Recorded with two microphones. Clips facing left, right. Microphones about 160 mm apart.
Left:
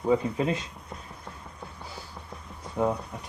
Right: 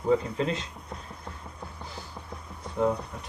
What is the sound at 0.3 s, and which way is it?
Speech, 10° left (ahead or behind).